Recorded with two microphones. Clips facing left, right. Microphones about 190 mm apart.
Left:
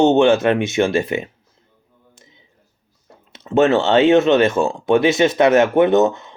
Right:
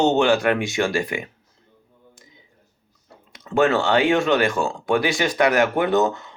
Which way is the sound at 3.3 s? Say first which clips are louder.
Left 4 dB; 25° left (ahead or behind).